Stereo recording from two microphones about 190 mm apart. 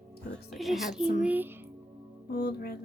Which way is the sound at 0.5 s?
Centre (ahead or behind).